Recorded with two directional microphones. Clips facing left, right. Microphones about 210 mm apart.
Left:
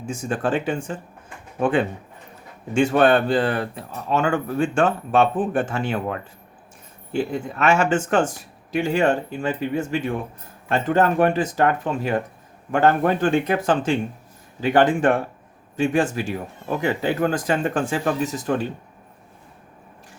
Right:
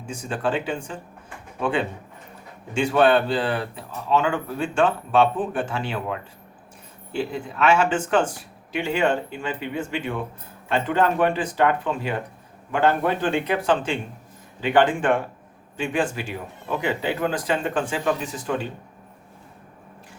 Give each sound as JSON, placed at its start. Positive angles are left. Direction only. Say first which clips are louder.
{"t": 0.1, "sound": "speech", "louder": "left 2 dB", "side_deg": 45}